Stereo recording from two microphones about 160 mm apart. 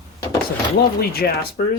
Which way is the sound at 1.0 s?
70° left (ahead or behind).